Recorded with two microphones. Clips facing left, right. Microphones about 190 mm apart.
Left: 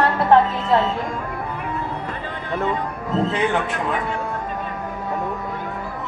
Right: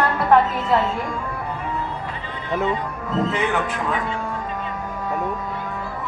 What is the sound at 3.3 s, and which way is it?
Speech, 30° left (ahead or behind).